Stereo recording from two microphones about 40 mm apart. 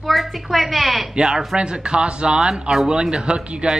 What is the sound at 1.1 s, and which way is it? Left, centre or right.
Speech, centre.